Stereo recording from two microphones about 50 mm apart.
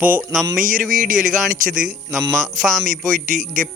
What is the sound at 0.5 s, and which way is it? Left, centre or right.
Speech, centre.